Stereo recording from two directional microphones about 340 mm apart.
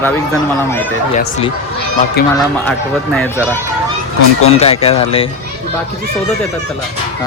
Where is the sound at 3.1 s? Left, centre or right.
Centre.